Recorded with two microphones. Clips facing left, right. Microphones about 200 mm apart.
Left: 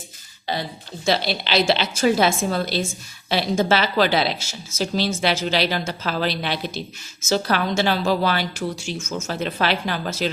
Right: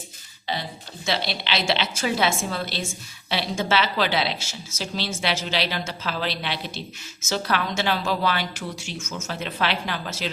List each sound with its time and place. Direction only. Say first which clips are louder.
1.0 s a woman's voice: left 5 dB; 40° left (ahead or behind)